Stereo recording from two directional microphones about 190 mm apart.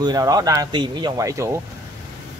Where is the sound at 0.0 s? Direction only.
20° right (ahead or behind).